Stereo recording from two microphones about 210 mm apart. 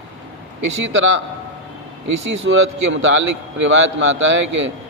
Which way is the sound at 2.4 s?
65° right (ahead or behind).